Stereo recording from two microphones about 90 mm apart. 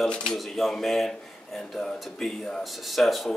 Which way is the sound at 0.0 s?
5° left (ahead or behind).